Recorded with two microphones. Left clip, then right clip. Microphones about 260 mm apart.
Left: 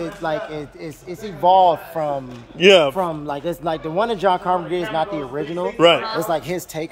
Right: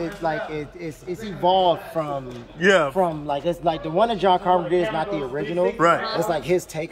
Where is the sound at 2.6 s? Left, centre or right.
Left.